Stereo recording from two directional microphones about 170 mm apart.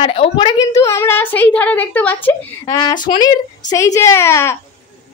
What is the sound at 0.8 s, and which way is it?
A woman's voice, 15° left (ahead or behind).